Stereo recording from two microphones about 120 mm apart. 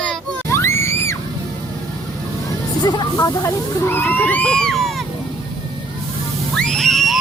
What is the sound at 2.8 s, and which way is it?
Speech, 35° left (ahead or behind).